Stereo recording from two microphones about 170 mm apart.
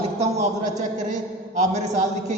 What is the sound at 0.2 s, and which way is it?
A man's voice, 45° right (ahead or behind).